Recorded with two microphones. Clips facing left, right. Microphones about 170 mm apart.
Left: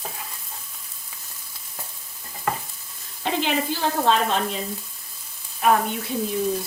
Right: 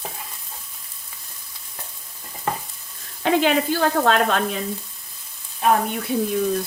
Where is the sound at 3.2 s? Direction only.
60° right (ahead or behind).